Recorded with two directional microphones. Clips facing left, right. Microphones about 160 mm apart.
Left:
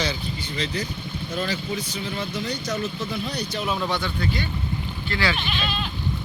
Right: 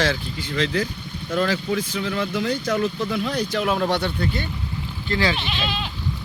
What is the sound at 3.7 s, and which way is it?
Speech, 60° right (ahead or behind).